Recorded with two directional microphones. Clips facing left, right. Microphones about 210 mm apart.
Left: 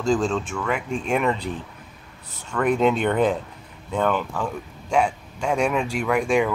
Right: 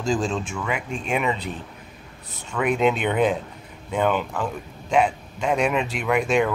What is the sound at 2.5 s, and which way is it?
Speech, 5° right (ahead or behind).